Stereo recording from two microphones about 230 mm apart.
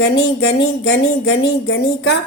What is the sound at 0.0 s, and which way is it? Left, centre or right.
Speech, left.